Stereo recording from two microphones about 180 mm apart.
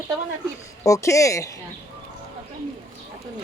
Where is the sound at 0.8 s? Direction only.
15° left (ahead or behind).